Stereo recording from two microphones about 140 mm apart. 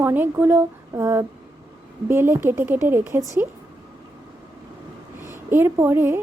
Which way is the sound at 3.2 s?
25° left (ahead or behind).